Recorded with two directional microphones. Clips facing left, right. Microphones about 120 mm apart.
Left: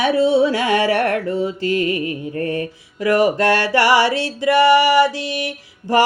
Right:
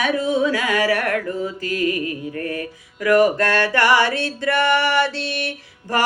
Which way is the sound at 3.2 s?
15° left (ahead or behind).